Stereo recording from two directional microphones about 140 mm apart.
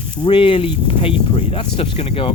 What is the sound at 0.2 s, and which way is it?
Speech, 40° left (ahead or behind).